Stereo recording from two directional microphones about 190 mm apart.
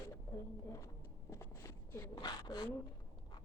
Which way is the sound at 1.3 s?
15° left (ahead or behind).